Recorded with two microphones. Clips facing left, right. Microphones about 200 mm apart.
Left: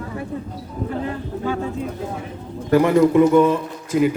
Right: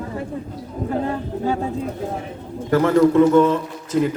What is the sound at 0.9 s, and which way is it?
Speech, 40° right (ahead or behind).